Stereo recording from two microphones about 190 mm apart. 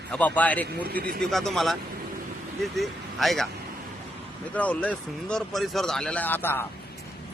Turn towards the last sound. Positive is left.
turn(degrees=10)  # may be behind; listen again after turning